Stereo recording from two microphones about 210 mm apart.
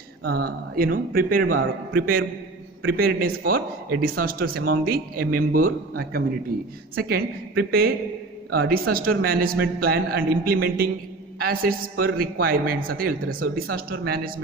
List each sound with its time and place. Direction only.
0.3 s a man's voice: 50° right (ahead or behind)
2.8 s a man's voice: 45° right (ahead or behind)
6.9 s a man's voice: 45° right (ahead or behind)